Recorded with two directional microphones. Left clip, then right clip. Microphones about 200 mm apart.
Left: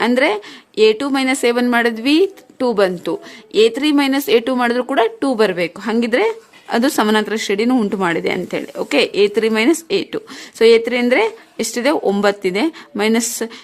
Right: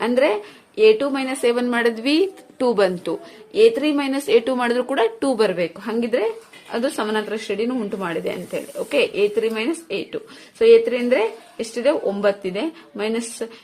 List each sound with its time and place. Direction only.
0.0 s speech: 40° left (ahead or behind)